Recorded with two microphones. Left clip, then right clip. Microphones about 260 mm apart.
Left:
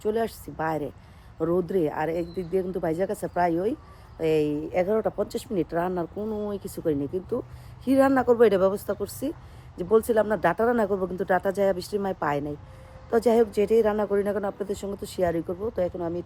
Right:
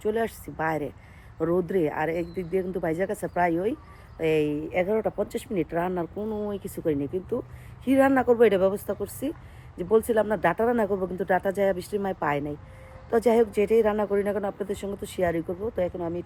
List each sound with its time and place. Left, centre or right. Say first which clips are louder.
0.0 s speech: even; centre